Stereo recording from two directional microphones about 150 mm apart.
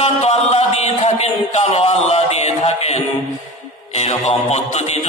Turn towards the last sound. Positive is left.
turn(degrees=45)  # may be behind; listen again after turning